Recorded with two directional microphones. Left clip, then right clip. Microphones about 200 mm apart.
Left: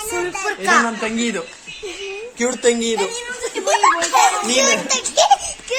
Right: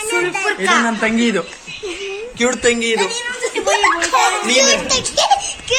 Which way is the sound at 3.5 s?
50° left (ahead or behind).